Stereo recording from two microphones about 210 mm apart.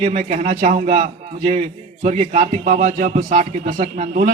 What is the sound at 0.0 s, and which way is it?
A man's voice, 30° right (ahead or behind).